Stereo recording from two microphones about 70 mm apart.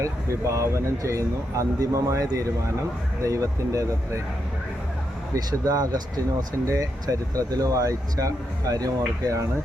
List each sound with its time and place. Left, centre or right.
0.0 s speech: right
5.5 s speech: right
6.7 s speech: right